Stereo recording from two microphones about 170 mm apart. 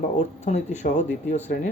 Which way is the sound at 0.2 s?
40° left (ahead or behind).